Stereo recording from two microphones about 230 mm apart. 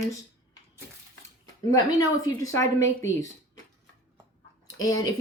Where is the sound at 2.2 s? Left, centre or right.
Centre.